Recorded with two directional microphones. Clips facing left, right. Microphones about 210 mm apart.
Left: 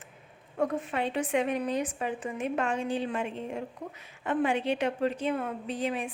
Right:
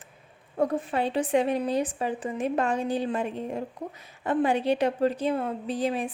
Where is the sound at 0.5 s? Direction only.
35° right (ahead or behind).